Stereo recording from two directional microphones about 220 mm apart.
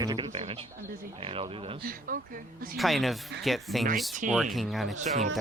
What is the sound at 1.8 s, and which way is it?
Speech, 40° right (ahead or behind).